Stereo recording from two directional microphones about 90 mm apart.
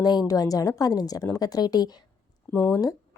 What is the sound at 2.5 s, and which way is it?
Speech, 30° left (ahead or behind).